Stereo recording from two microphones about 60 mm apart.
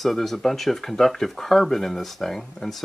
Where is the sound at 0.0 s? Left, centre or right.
Centre.